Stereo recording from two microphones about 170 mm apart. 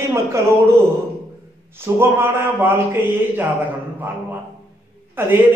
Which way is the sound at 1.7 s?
15° right (ahead or behind).